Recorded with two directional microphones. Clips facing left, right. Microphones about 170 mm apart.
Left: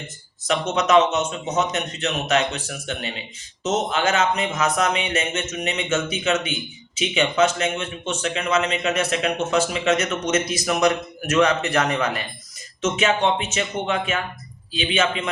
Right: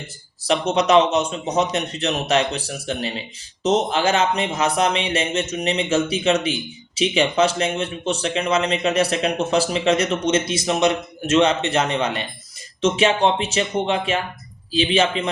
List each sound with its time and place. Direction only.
0.4 s a man's voice: 30° right (ahead or behind)